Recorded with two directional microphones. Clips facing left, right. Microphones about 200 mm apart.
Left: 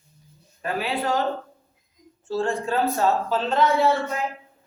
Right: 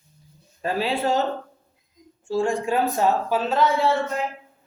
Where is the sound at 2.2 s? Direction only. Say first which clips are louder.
Right 2 dB; 15° right (ahead or behind).